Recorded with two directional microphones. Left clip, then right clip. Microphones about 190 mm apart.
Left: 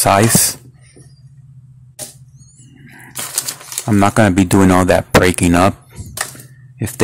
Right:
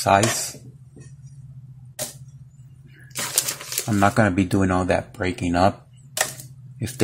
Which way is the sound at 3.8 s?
20° left (ahead or behind).